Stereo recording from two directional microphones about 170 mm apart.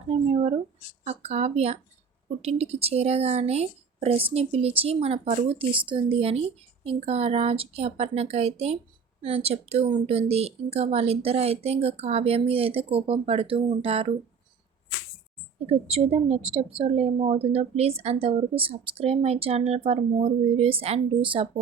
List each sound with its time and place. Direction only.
0.1 s a sound: 40° right (ahead or behind)
1.0 s a woman's voice: 40° right (ahead or behind)
15.5 s a woman's voice: 35° right (ahead or behind)